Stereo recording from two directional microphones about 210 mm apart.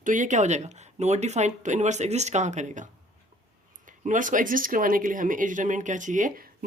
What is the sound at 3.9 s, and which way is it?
Speech, 40° right (ahead or behind).